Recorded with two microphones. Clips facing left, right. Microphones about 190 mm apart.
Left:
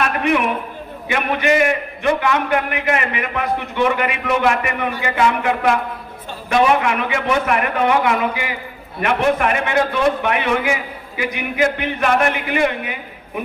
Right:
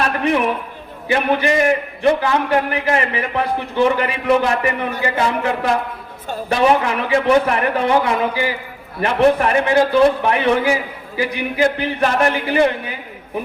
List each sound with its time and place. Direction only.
0.0 s a man's voice: 35° right (ahead or behind)